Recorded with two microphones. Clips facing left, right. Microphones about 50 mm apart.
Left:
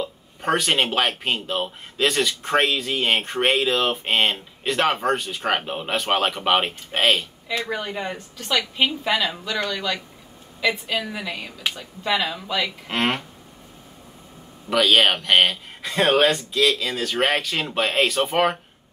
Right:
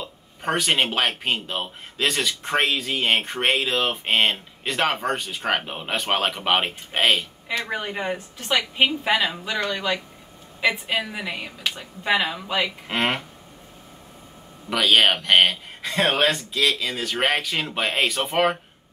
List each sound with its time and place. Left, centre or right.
0.0 s speech: centre
7.7 s a woman's voice: centre
12.8 s speech: centre
14.7 s speech: centre